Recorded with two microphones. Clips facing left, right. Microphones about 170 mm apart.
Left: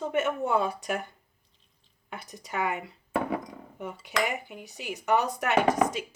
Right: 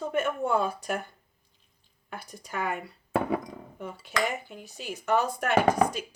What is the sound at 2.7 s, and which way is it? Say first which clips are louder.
Speech: right 2 dB; 20° left (ahead or behind).